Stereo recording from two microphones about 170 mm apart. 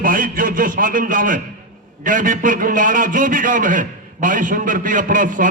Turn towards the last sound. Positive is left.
turn(degrees=-50)  # may be behind; listen again after turning